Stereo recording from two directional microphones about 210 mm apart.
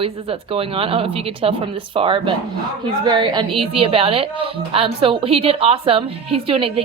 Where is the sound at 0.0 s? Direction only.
25° right (ahead or behind).